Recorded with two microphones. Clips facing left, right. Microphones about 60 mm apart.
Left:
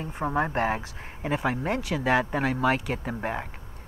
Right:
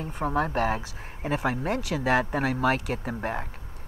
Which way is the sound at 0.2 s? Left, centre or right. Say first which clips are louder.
Even; left.